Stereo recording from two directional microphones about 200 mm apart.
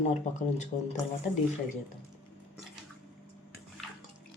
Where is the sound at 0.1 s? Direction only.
35° left (ahead or behind).